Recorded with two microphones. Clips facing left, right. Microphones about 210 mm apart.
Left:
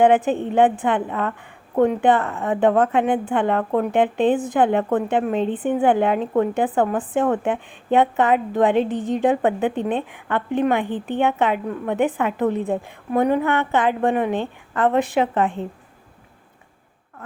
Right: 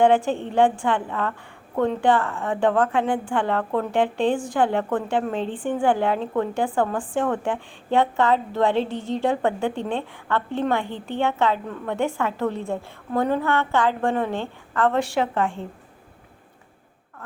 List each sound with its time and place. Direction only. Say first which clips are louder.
0.0 s a woman's voice: left 2 dB; 20° left (ahead or behind)